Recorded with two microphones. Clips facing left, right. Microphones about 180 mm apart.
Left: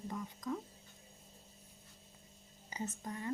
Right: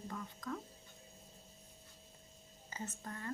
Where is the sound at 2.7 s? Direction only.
15° left (ahead or behind).